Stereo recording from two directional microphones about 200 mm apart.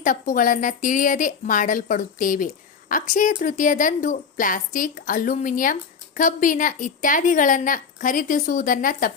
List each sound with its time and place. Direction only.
0.0 s speech: 40° left (ahead or behind)